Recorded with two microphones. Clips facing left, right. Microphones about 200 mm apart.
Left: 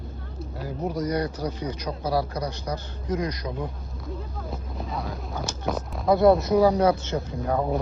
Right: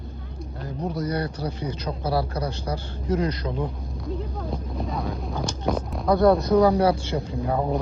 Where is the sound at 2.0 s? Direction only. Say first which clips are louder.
Even; 30° right (ahead or behind).